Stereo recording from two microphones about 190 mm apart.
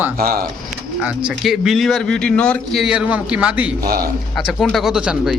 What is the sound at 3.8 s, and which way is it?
Speech, 55° right (ahead or behind).